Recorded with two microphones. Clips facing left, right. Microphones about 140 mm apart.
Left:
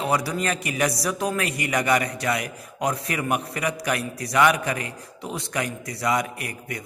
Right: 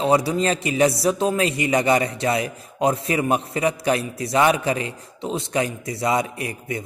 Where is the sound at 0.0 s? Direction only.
25° right (ahead or behind).